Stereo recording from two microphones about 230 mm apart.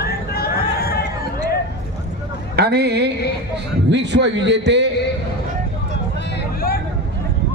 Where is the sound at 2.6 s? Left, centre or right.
Right.